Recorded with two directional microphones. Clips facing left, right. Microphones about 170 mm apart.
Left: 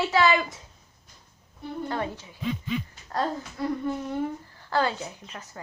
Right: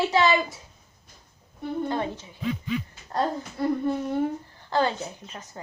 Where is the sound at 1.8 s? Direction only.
20° right (ahead or behind).